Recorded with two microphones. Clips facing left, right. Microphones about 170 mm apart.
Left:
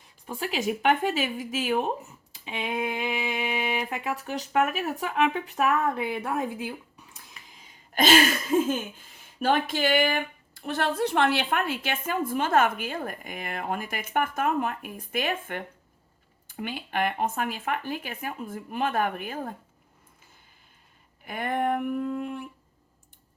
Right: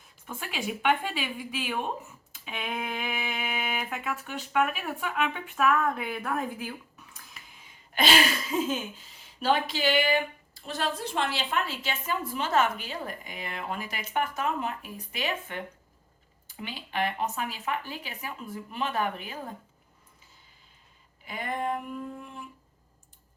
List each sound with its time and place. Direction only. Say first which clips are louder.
0.3 s speech: left 6 dB; 40° left (ahead or behind)
2.3 s speech: left 4 dB; 25° left (ahead or behind)
4.0 s speech: left 4 dB; 40° left (ahead or behind)
5.8 s speech: left 3 dB; 25° left (ahead or behind)
7.9 s speech: left 4 dB; 45° left (ahead or behind)
21.2 s a sound: left 4 dB; 55° left (ahead or behind)